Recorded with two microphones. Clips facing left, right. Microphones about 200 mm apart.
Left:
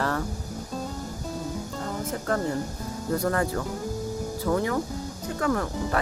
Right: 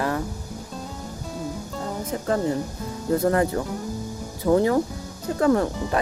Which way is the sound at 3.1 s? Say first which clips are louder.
Right 5 dB; 25° right (ahead or behind).